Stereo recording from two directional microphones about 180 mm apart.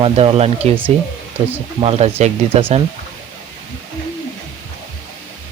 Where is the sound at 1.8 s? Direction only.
35° right (ahead or behind).